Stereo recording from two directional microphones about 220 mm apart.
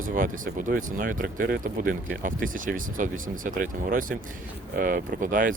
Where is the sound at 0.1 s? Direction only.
35° right (ahead or behind).